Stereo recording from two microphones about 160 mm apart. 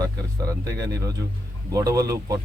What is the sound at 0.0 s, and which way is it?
Speech, 20° right (ahead or behind).